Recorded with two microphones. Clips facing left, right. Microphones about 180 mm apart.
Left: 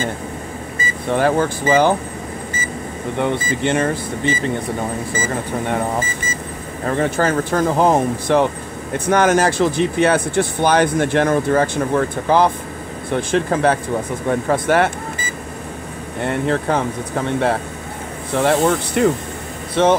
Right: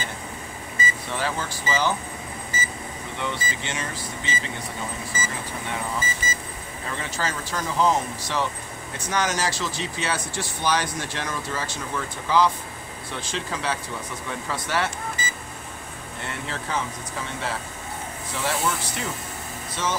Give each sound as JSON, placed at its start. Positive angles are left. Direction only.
{"t": 1.0, "sound": "speech", "side_deg": 55}
{"t": 3.2, "sound": "speech", "side_deg": 55}